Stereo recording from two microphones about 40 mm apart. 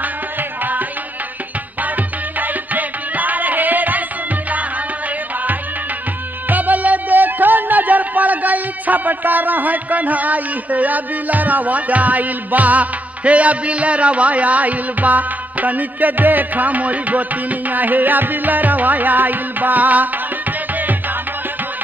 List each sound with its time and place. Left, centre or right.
0.0 s music: right
2.4 s music: right
6.5 s music: right